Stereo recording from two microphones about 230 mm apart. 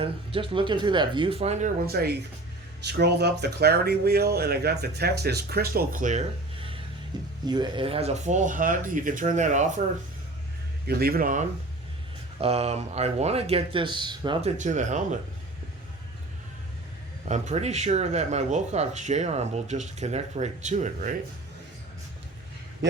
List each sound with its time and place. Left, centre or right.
0.0 s speech: right
1.9 s speech: right
10.8 s speech: right; by 14.5 s centre
14.6 s speech: right
17.2 s speech: right